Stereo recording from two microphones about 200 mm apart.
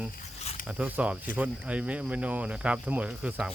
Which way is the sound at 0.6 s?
5° right (ahead or behind).